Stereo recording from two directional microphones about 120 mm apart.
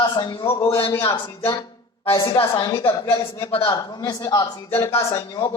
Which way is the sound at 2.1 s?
45° left (ahead or behind).